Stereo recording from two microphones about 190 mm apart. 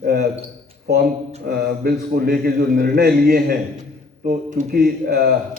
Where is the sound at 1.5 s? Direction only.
55° right (ahead or behind).